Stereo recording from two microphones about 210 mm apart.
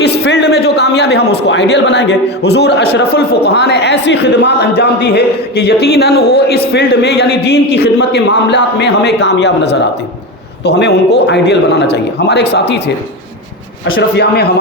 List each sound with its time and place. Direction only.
0.0 s a man's voice: 55° left (ahead or behind)
13.9 s a man's voice: 50° left (ahead or behind)